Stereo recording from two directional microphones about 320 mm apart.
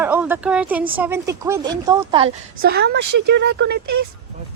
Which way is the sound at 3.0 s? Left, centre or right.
Right.